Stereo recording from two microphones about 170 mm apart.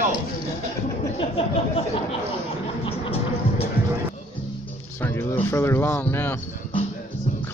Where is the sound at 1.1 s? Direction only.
35° left (ahead or behind).